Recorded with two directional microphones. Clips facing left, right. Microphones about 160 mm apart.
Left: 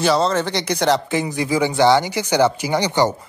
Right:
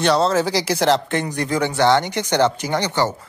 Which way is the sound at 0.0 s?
Centre (ahead or behind).